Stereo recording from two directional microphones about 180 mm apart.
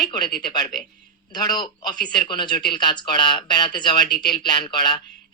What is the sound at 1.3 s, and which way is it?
Speech, 20° left (ahead or behind).